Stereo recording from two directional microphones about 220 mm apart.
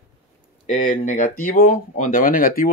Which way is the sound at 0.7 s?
35° left (ahead or behind).